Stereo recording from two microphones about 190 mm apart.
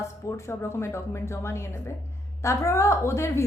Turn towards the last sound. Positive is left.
turn(degrees=15)  # may be behind; listen again after turning